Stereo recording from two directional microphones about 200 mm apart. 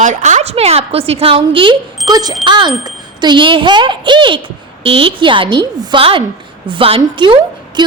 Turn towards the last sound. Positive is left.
turn(degrees=-20)  # may be behind; listen again after turning